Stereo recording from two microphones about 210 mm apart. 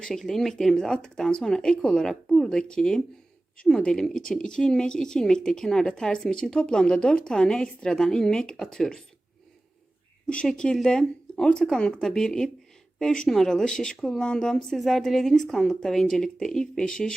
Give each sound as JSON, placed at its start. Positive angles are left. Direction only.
{"t": 0.0, "sound": "speech", "side_deg": 0}
{"t": 10.2, "sound": "speech", "side_deg": 5}